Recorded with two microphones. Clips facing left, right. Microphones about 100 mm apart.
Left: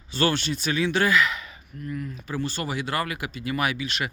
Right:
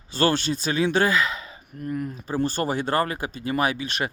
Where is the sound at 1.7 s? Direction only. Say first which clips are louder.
Right 4 dB; 45° right (ahead or behind).